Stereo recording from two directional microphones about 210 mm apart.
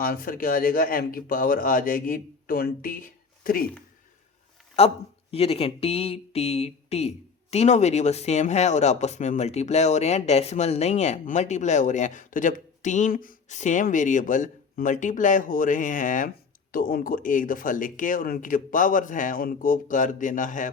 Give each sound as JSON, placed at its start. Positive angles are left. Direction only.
{"t": 0.0, "sound": "speech", "side_deg": 45}
{"t": 4.8, "sound": "speech", "side_deg": 30}